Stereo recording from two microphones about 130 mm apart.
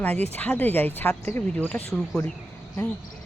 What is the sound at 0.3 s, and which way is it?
Speech, 10° left (ahead or behind).